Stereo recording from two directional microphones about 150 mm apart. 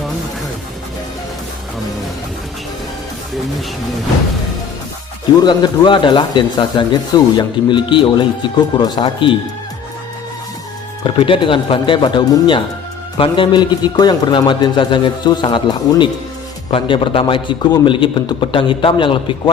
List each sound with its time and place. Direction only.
5.4 s a man's voice: 30° left (ahead or behind)
11.0 s a man's voice: 35° left (ahead or behind)